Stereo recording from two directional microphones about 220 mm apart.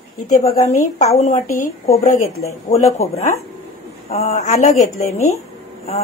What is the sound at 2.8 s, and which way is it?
A woman's voice, 30° left (ahead or behind).